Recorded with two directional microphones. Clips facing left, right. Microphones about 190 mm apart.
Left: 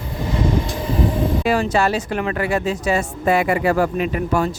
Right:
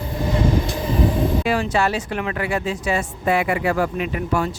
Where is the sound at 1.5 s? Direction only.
40° left (ahead or behind).